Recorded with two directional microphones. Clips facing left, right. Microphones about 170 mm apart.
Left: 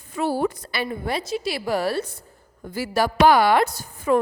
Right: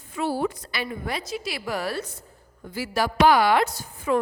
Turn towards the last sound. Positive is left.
turn(degrees=40)  # may be behind; listen again after turning